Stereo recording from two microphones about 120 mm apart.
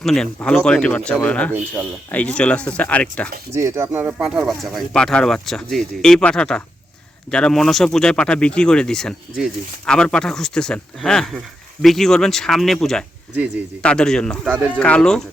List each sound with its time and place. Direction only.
0.0 s speech: 5° left (ahead or behind)
1.5 s speech: 15° right (ahead or behind)
2.0 s speech: 10° left (ahead or behind)
3.5 s speech: 25° right (ahead or behind)
4.2 s speech: centre (ahead or behind)